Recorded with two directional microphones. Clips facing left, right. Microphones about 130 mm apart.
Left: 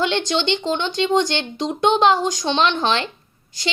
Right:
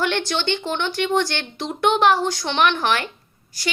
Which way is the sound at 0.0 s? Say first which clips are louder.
Left 2 dB; 20° left (ahead or behind).